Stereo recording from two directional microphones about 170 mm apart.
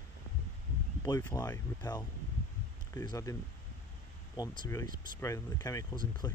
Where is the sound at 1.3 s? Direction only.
20° left (ahead or behind).